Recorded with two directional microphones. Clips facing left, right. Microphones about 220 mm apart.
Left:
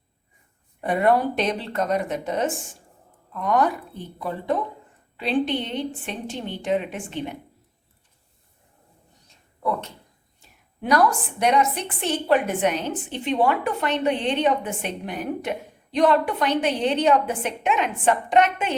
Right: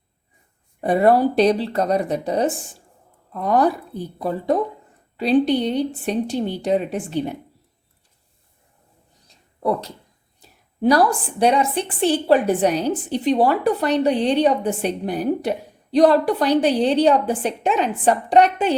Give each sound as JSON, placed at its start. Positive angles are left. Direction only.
{"t": 0.8, "sound": "a woman's voice", "side_deg": -35}
{"t": 9.2, "sound": "a sound", "side_deg": -35}
{"t": 10.4, "sound": "a woman's voice", "side_deg": -35}